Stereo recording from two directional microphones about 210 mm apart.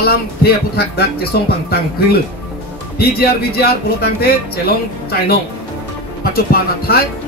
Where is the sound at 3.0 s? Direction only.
50° left (ahead or behind).